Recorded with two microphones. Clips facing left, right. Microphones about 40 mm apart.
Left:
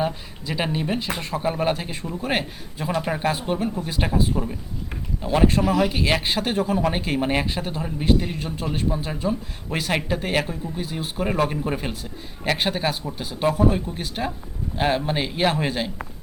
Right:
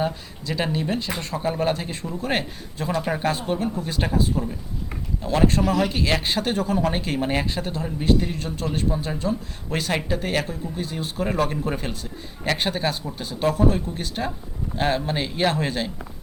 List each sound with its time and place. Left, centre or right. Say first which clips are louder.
0.0 s speech: even; centre